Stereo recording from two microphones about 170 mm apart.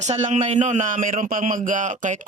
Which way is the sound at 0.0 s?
45° right (ahead or behind).